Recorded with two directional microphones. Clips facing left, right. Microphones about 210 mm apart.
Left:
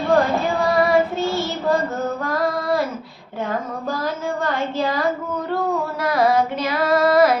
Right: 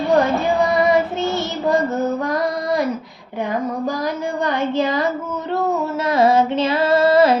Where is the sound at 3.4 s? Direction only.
15° right (ahead or behind).